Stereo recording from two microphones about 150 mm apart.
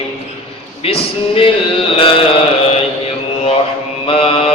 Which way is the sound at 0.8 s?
40° left (ahead or behind).